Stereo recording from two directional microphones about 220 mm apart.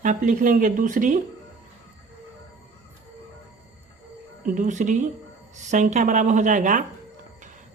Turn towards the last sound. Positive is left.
turn(degrees=-35)  # may be behind; listen again after turning